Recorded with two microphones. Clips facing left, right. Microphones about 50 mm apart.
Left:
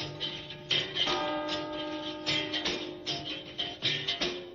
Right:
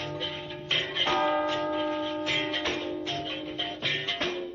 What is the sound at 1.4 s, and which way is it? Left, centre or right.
Church bell, right.